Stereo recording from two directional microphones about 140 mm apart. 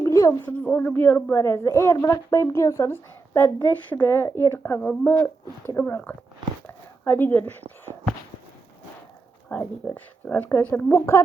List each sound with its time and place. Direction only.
0.0 s a sound: 25° left (ahead or behind)
0.5 s a woman's voice: 10° left (ahead or behind)
7.0 s a woman's voice: 15° left (ahead or behind)
9.5 s a woman's voice: 10° left (ahead or behind)